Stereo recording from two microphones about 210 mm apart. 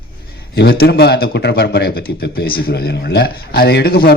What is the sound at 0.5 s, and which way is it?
Speech, 45° left (ahead or behind).